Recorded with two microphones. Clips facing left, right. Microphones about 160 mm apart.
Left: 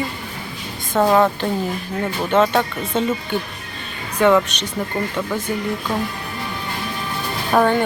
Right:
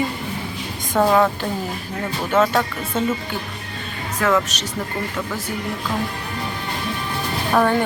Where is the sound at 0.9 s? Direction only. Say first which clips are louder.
Left 1 dB; 5° left (ahead or behind).